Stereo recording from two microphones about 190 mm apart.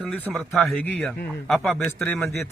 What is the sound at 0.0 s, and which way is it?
A man's voice, centre (ahead or behind).